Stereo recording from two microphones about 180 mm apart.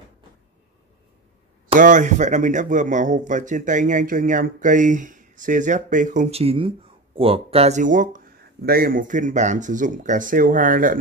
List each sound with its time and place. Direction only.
1.8 s speech: 45° right (ahead or behind)
8.6 s speech: 55° right (ahead or behind)